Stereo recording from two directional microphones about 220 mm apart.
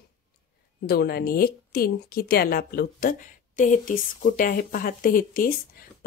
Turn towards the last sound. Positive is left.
turn(degrees=40)  # may be behind; listen again after turning